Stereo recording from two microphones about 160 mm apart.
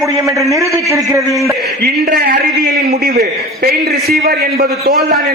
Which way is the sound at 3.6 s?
70° right (ahead or behind).